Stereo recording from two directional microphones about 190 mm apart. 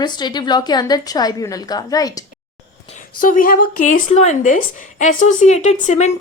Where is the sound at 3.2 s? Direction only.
45° left (ahead or behind).